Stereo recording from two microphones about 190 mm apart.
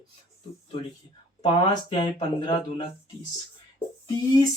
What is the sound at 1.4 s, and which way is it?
Speech, 25° left (ahead or behind).